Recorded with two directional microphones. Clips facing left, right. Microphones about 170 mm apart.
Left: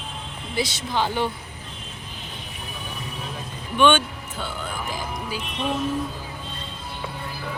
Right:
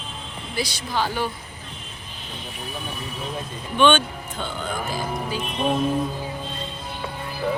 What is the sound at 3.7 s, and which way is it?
Speech, 10° left (ahead or behind).